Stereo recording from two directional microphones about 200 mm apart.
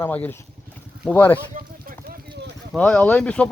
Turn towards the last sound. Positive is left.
turn(degrees=5)  # may be behind; listen again after turning